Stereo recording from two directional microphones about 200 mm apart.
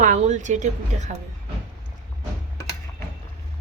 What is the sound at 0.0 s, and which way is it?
Speech, 35° right (ahead or behind).